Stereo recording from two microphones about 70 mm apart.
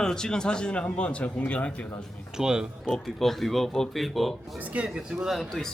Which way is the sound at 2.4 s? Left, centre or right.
Centre.